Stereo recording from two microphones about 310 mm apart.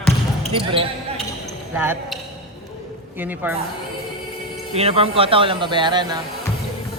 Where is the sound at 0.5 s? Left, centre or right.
Centre.